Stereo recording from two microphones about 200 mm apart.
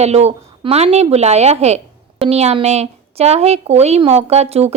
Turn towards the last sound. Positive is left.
turn(degrees=-30)  # may be behind; listen again after turning